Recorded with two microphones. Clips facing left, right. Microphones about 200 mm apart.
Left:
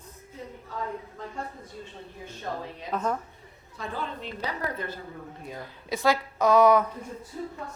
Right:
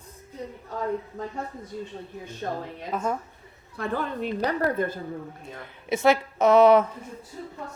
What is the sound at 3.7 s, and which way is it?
A woman's voice, 55° right (ahead or behind).